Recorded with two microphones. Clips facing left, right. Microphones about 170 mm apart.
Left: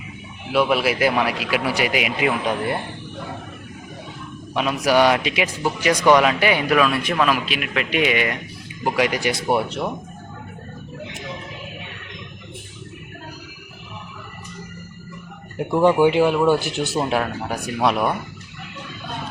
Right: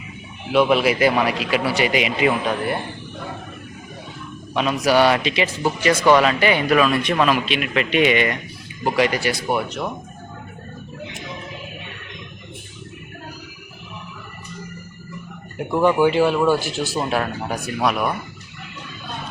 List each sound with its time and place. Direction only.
0.5 s speech: 5° left (ahead or behind)
4.5 s speech: 10° left (ahead or behind)
9.3 s speech: 30° left (ahead or behind)
15.8 s speech: 25° left (ahead or behind)
17.8 s speech: 25° left (ahead or behind)